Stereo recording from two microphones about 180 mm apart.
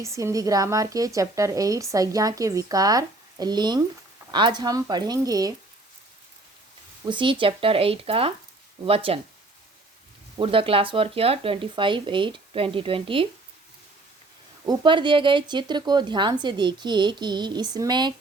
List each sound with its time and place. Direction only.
0.0 s a woman's voice: 15° right (ahead or behind)
7.0 s speech: 25° right (ahead or behind)
10.3 s a woman's voice: 30° right (ahead or behind)
14.6 s a woman's voice: 25° right (ahead or behind)